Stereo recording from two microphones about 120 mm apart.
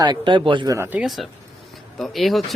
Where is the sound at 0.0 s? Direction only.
40° right (ahead or behind).